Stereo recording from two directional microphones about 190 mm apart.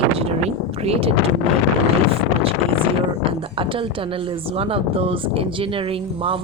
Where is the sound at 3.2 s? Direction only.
30° right (ahead or behind).